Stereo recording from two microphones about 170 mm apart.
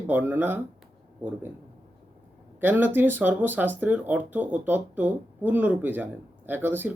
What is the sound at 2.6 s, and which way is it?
Speech, 10° right (ahead or behind).